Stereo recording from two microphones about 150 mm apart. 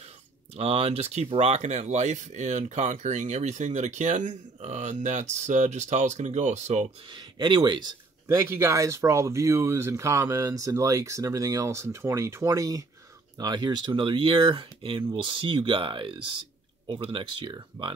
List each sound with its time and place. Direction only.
0.6 s speech: 40° right (ahead or behind)
7.1 s speech: 30° right (ahead or behind)
8.3 s speech: 15° right (ahead or behind); by 17.9 s 30° right (ahead or behind)